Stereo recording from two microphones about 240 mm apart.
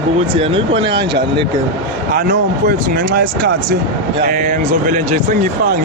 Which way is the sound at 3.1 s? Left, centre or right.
Right.